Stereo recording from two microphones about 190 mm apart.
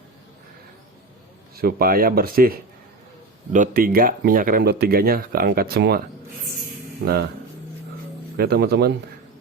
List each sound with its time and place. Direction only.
1.5 s speech: 50° right (ahead or behind)
7.0 s speech: 55° right (ahead or behind)
8.4 s speech: 55° right (ahead or behind)